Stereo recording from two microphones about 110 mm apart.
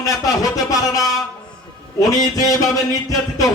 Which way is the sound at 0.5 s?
30° left (ahead or behind).